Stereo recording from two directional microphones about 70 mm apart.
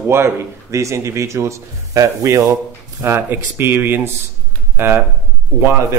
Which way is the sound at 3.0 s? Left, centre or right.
Right.